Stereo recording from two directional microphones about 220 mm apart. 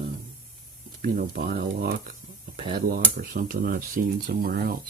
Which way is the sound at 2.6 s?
25° right (ahead or behind).